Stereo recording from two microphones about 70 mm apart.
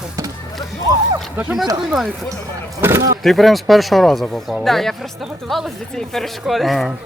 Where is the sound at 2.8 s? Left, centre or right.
Right.